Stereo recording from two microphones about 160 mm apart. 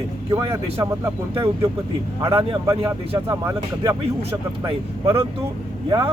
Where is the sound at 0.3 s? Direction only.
25° right (ahead or behind).